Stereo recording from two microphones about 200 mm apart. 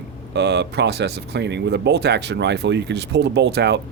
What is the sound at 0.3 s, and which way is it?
Speech, 60° right (ahead or behind).